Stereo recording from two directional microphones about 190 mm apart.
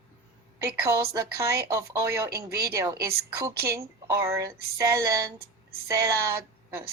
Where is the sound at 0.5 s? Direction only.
15° right (ahead or behind).